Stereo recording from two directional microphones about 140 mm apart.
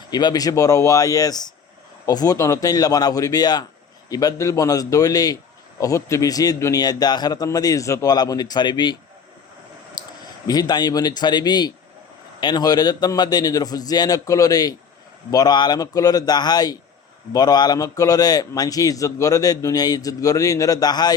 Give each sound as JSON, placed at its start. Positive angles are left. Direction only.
{"t": 0.1, "sound": "a man's voice", "side_deg": 30}
{"t": 10.4, "sound": "a man's voice", "side_deg": 30}